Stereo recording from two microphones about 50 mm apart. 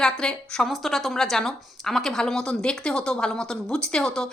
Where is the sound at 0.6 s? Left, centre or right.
Centre.